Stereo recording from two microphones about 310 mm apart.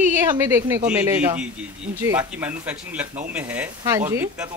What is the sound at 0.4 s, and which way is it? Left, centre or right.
Speech, centre.